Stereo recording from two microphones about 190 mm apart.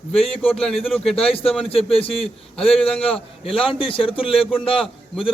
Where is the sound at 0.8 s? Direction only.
Centre (ahead or behind).